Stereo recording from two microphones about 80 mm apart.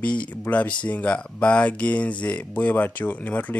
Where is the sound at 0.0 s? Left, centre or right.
Centre.